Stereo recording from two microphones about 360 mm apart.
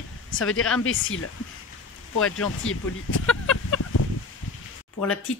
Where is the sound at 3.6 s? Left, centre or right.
Left.